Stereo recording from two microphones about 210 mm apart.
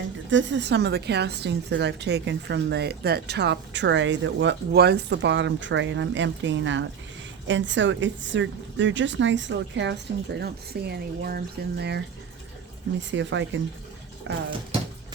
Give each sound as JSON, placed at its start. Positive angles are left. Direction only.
{"t": 0.3, "sound": "a woman's voice", "side_deg": -60}